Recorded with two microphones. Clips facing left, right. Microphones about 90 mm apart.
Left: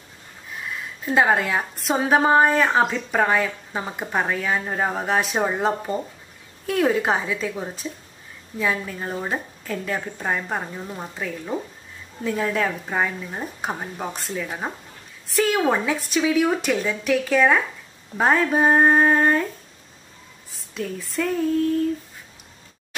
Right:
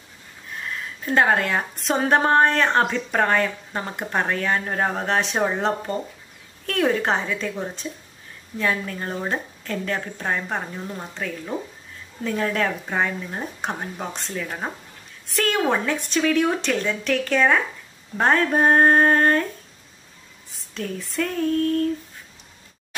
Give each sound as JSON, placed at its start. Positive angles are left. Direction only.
{"t": 0.6, "sound": "a woman's voice", "side_deg": 5}
{"t": 20.5, "sound": "a woman's voice", "side_deg": 0}